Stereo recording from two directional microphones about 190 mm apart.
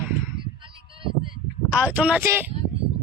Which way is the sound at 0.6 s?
25° right (ahead or behind).